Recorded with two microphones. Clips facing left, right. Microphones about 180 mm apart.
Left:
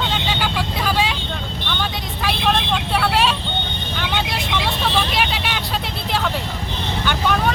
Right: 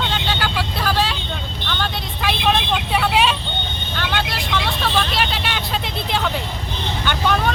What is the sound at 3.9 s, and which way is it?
Vehicle, 20° left (ahead or behind).